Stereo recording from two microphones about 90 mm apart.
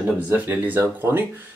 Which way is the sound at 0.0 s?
25° right (ahead or behind).